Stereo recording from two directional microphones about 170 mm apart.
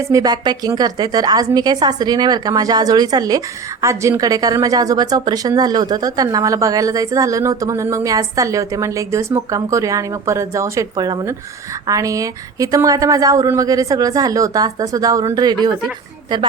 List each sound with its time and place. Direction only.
0.0 s a woman's voice: 20° right (ahead or behind)